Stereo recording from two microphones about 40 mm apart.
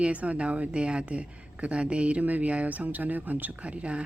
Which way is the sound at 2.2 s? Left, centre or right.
Right.